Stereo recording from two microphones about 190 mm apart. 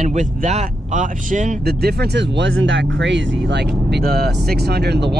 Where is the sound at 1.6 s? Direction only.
55° right (ahead or behind).